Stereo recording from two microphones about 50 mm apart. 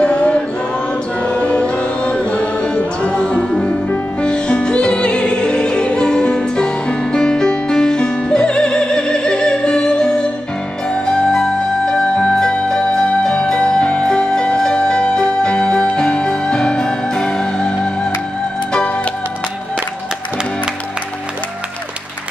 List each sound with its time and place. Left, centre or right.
0.0 s music: left